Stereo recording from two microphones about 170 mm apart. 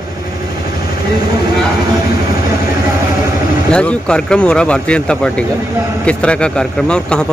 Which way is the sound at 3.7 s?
5° left (ahead or behind).